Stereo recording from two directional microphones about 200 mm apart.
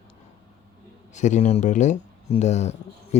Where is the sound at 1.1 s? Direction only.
35° left (ahead or behind).